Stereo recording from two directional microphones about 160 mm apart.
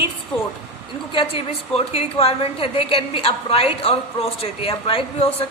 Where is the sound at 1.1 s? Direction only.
35° left (ahead or behind).